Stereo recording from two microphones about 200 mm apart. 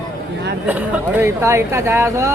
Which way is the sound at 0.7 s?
5° right (ahead or behind).